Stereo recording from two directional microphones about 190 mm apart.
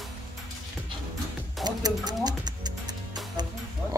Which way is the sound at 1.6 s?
20° right (ahead or behind).